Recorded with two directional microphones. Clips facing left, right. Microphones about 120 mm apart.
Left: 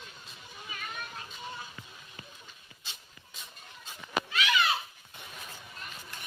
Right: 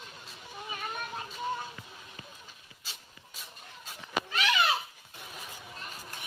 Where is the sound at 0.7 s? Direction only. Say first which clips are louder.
Right 4 dB; 35° right (ahead or behind).